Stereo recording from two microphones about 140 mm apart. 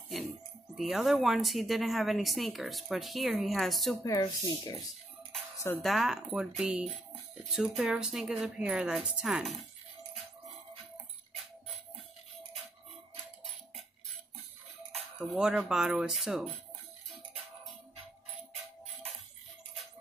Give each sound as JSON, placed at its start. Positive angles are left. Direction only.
{"t": 0.7, "sound": "speech", "side_deg": 0}
{"t": 4.0, "sound": "speech", "side_deg": 30}
{"t": 5.8, "sound": "speech", "side_deg": 0}
{"t": 15.1, "sound": "speech", "side_deg": -5}